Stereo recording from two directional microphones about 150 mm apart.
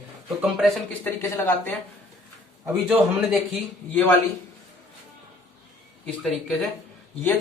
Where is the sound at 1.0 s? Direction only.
15° left (ahead or behind).